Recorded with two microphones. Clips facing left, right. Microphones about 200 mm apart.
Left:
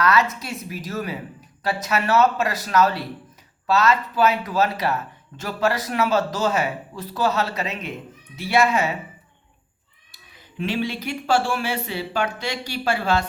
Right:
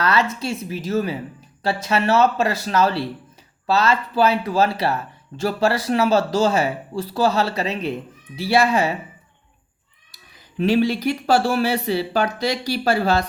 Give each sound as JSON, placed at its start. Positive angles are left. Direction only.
{"t": 0.0, "sound": "speech", "side_deg": -30}
{"t": 10.6, "sound": "speech", "side_deg": -40}